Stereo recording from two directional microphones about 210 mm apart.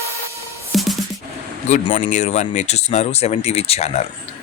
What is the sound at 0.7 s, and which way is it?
Music, centre (ahead or behind).